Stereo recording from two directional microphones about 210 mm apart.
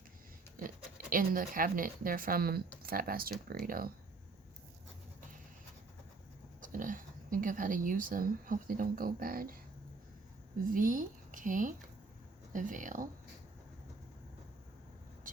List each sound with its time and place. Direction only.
0.6 s speech: 40° right (ahead or behind)
6.6 s speech: 40° right (ahead or behind)
10.8 s speech: 40° right (ahead or behind)